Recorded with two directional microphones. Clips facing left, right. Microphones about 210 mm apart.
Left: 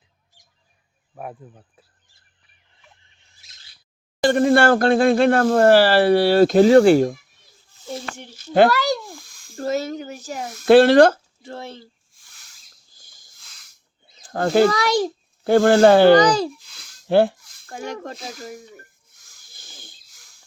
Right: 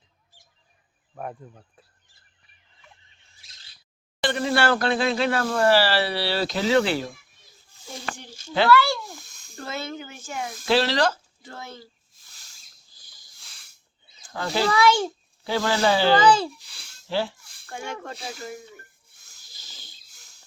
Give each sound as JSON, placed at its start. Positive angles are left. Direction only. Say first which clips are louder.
{"t": 1.1, "sound": "speech", "louder": "left 1 dB", "side_deg": 5}
{"t": 4.2, "sound": "speech", "louder": "left 8 dB", "side_deg": 45}
{"t": 8.5, "sound": "speech", "louder": "left 4 dB", "side_deg": 45}
{"t": 10.7, "sound": "speech", "louder": "left 11 dB", "side_deg": 55}
{"t": 11.4, "sound": "speech", "louder": "left 6 dB", "side_deg": 30}
{"t": 12.9, "sound": "a sound", "louder": "left 4 dB", "side_deg": 50}
{"t": 14.3, "sound": "speech", "louder": "left 8 dB", "side_deg": 50}
{"t": 16.6, "sound": "a sound", "louder": "left 1 dB", "side_deg": -30}
{"t": 17.1, "sound": "speech", "louder": "left 11 dB", "side_deg": 55}
{"t": 17.7, "sound": "speech", "louder": "left 4 dB", "side_deg": 40}
{"t": 19.5, "sound": "a sound", "louder": "left 5 dB", "side_deg": 55}